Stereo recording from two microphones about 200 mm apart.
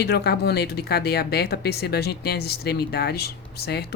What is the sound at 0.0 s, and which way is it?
A woman's voice, 55° left (ahead or behind).